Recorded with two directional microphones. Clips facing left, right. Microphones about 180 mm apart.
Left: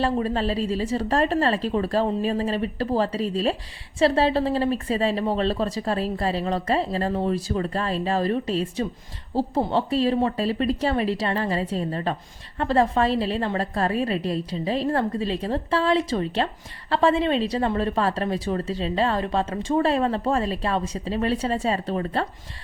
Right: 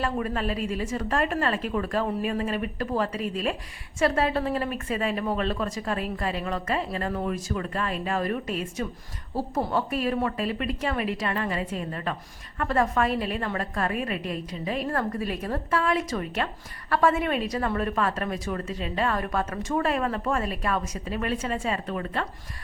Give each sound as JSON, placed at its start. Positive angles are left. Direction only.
{"t": 0.0, "sound": "a woman's voice", "side_deg": 30}